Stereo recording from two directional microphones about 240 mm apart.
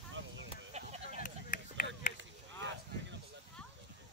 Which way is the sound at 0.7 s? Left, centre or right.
Right.